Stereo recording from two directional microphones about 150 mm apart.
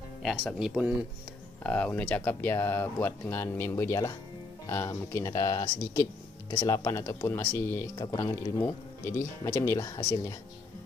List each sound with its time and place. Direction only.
0.2 s speech: centre (ahead or behind)
1.6 s speech: 5° left (ahead or behind)